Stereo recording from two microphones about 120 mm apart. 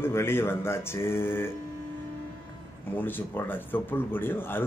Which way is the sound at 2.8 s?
15° left (ahead or behind).